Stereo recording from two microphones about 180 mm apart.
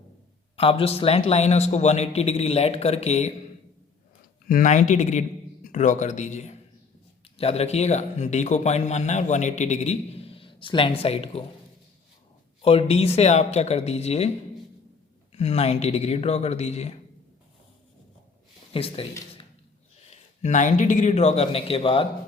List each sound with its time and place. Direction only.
0.5 s speech: 30° left (ahead or behind)
4.4 s a man's voice: 45° left (ahead or behind)
12.6 s speech: 35° left (ahead or behind)
15.3 s speech: 35° left (ahead or behind)
18.7 s speech: 30° left (ahead or behind)
20.1 s a man's voice: 40° left (ahead or behind)